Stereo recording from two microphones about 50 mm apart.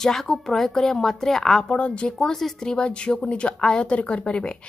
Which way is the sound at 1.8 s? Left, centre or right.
Left.